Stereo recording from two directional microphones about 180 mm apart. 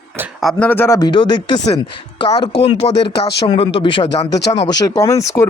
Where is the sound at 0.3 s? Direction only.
5° left (ahead or behind); by 1.8 s 25° left (ahead or behind).